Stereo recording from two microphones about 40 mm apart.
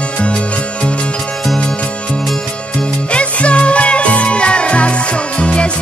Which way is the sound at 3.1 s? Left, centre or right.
Left.